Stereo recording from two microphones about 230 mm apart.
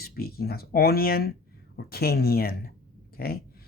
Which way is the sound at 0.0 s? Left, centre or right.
Left.